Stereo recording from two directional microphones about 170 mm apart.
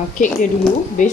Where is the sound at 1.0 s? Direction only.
50° left (ahead or behind).